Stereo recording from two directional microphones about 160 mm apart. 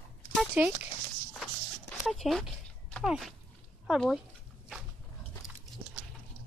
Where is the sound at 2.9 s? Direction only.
Centre (ahead or behind).